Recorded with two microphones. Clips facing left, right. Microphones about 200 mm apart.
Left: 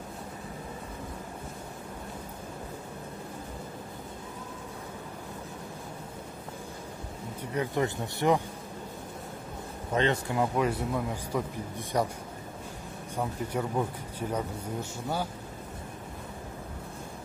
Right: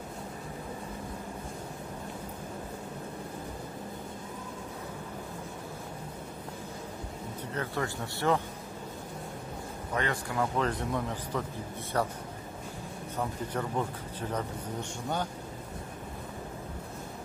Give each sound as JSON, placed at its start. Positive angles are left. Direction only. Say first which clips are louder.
{"t": 7.5, "sound": "a man's voice", "louder": "left 5 dB", "side_deg": 15}
{"t": 9.9, "sound": "a man's voice", "louder": "left 4 dB", "side_deg": 20}
{"t": 13.2, "sound": "a man's voice", "louder": "left 2 dB", "side_deg": 10}